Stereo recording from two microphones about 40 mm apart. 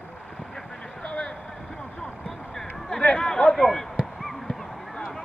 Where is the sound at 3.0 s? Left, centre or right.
Left.